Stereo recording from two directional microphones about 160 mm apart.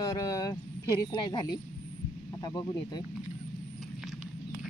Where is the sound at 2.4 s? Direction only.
25° left (ahead or behind).